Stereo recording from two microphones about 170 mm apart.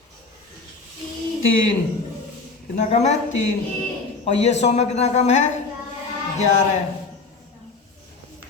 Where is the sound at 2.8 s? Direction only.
40° left (ahead or behind).